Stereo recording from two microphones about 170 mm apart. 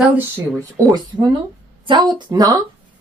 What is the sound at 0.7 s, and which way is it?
A woman's voice, 20° right (ahead or behind).